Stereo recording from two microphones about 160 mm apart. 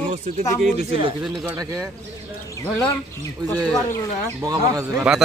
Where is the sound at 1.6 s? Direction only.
20° right (ahead or behind).